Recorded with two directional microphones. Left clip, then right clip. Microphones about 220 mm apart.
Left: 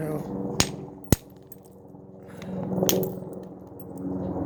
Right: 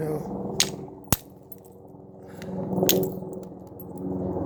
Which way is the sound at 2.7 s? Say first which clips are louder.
Right 2 dB; 30° right (ahead or behind).